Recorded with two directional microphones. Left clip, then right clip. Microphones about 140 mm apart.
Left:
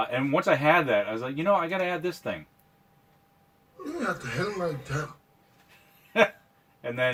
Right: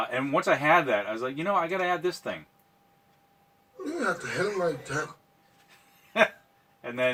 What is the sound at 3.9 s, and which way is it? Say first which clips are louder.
Speech: right 2 dB; 30° right (ahead or behind).